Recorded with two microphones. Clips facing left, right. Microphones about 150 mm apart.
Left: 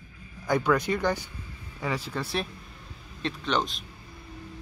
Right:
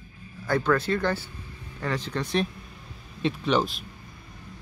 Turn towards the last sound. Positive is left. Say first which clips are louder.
# right 4 dB
turn(degrees=-5)  # may be behind; listen again after turning